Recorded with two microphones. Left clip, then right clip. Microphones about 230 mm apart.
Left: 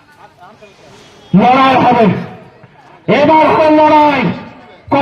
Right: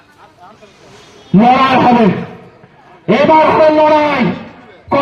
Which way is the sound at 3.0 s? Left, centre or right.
Left.